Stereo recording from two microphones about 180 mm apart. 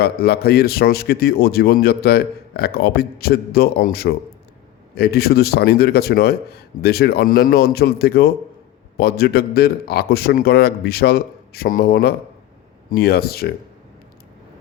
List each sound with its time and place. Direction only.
0.0 s speech: 60° left (ahead or behind)